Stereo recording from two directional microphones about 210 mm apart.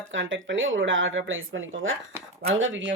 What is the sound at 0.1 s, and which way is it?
Speech, 65° right (ahead or behind).